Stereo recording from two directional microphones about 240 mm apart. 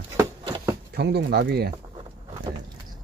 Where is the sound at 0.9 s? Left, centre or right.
Right.